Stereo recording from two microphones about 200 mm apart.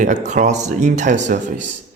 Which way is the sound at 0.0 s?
35° right (ahead or behind).